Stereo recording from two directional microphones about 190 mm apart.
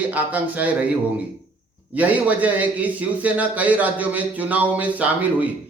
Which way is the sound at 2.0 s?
10° right (ahead or behind).